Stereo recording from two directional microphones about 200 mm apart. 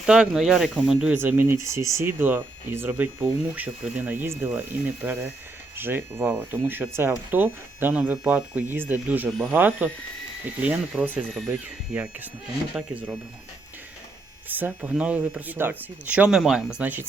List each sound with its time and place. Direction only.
0.0 s speech: 5° right (ahead or behind)
5.7 s speech: 10° right (ahead or behind)
14.4 s speech: 10° right (ahead or behind)